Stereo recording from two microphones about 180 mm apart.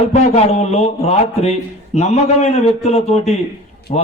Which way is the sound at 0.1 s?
35° left (ahead or behind).